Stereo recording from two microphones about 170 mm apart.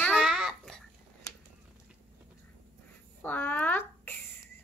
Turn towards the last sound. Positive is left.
turn(degrees=10)  # may be behind; listen again after turning